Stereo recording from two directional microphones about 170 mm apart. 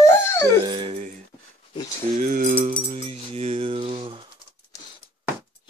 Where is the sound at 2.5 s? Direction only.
45° right (ahead or behind).